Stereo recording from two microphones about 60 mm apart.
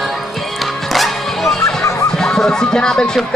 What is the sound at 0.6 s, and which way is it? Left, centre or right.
Music, centre.